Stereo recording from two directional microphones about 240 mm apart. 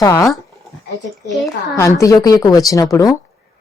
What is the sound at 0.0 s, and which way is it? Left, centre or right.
Speech, centre.